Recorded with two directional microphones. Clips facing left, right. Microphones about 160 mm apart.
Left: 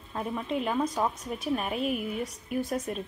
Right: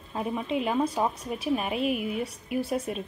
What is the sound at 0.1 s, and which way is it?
A woman's voice, 10° right (ahead or behind).